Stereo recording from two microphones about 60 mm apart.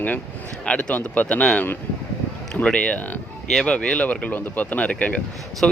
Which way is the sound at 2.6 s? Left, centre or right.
Centre.